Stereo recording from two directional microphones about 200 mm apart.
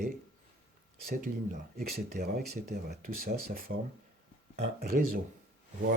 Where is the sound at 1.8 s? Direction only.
50° right (ahead or behind).